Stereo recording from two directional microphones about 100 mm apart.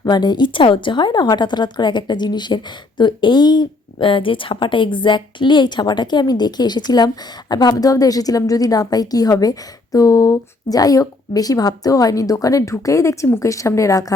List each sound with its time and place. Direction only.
0.0 s a woman's voice: 45° left (ahead or behind)